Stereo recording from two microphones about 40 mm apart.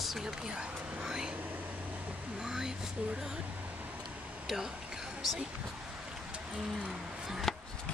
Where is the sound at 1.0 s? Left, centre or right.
Centre.